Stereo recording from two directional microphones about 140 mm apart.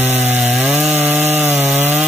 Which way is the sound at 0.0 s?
10° right (ahead or behind).